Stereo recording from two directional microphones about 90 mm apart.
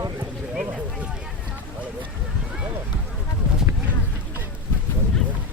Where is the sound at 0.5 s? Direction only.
5° right (ahead or behind).